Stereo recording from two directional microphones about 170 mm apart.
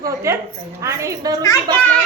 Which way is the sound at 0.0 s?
15° right (ahead or behind).